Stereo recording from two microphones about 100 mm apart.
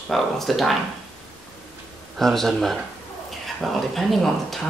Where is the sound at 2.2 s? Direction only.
5° left (ahead or behind).